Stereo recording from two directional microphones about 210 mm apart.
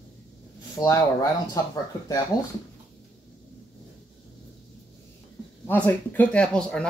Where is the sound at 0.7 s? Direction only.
15° left (ahead or behind).